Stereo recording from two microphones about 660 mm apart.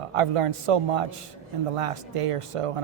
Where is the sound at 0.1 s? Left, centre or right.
Right.